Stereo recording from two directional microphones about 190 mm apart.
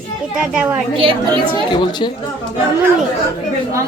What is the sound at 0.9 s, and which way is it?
Speech, 25° right (ahead or behind).